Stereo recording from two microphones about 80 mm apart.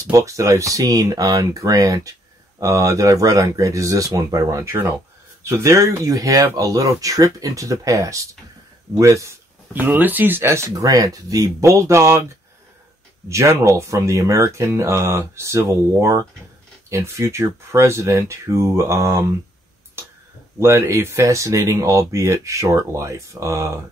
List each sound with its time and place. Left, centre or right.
0.0 s speech: right
4.6 s speech: right
9.8 s speech: right
10.9 s speech: right
13.3 s speech: right
20.5 s speech: right